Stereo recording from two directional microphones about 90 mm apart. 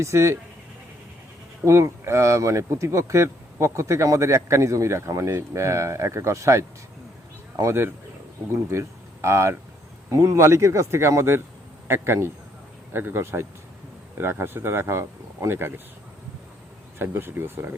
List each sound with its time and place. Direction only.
0.0 s speech: 35° right (ahead or behind)
1.6 s speech: 35° right (ahead or behind)
17.0 s speech: 25° right (ahead or behind)